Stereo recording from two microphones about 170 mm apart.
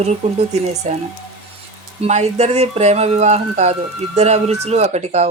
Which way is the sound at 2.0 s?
40° right (ahead or behind).